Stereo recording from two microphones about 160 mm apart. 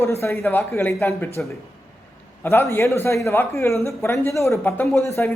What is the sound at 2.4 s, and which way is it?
Speech, 15° left (ahead or behind).